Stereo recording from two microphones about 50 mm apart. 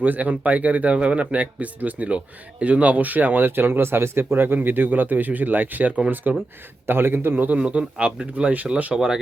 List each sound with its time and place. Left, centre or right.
0.0 s speech: right
6.3 s a man's voice: right
6.8 s a man's voice: right
7.6 s a man's voice: centre
9.0 s speech: centre